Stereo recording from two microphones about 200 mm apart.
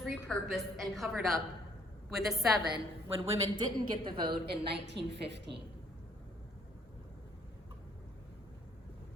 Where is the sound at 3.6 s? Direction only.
20° right (ahead or behind).